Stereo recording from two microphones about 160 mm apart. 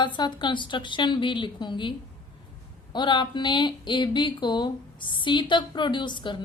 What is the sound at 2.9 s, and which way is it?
Speech, 30° left (ahead or behind).